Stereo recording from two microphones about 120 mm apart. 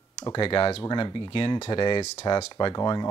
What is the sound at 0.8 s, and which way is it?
Speech, 35° left (ahead or behind).